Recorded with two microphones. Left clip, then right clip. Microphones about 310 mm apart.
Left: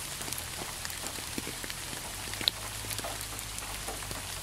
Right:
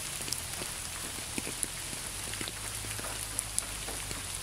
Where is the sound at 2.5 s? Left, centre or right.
Left.